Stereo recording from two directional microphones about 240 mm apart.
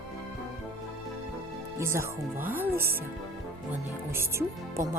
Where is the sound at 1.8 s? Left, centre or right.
Centre.